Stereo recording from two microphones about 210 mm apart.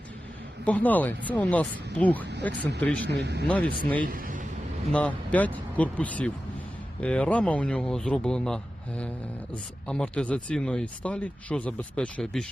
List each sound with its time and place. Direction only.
0.6 s speech: 5° left (ahead or behind)
2.6 s speech: 55° right (ahead or behind)
2.8 s speech: 5° left (ahead or behind)
3.1 s speech: 55° right (ahead or behind)
4.0 s speech: 40° right (ahead or behind)
4.9 s speech: 5° left (ahead or behind)